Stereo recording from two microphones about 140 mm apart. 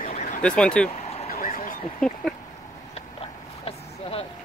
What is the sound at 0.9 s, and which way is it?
Vehicle, 50° left (ahead or behind).